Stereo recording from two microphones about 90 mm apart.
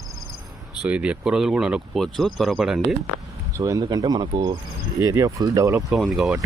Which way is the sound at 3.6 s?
40° right (ahead or behind).